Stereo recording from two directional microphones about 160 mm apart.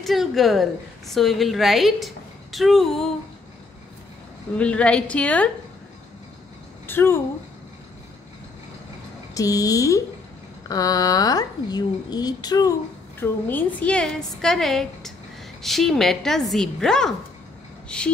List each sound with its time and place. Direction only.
0.0 s a woman's voice: centre (ahead or behind)
4.6 s a woman's voice: 5° left (ahead or behind)
6.9 s a woman's voice: 15° left (ahead or behind)
9.3 s a woman's voice: 20° left (ahead or behind)
13.2 s a woman's voice: 10° left (ahead or behind)